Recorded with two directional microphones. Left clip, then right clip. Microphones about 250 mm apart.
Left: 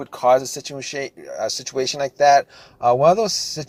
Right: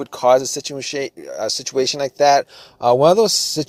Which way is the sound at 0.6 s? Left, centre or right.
Right.